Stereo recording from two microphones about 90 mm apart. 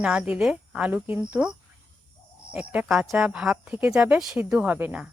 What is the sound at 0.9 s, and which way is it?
Speech, 20° right (ahead or behind).